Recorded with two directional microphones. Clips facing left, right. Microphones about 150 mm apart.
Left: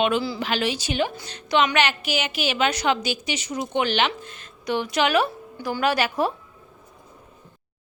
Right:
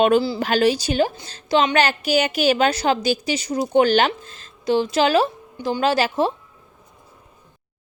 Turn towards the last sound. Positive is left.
turn(degrees=-30)  # may be behind; listen again after turning